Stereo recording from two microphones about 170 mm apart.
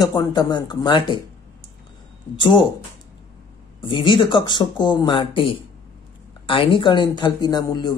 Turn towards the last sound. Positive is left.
turn(degrees=25)  # may be behind; listen again after turning